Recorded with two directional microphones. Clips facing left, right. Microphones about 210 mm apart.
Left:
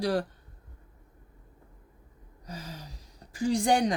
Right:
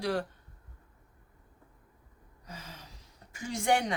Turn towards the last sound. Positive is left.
turn(degrees=35)  # may be behind; listen again after turning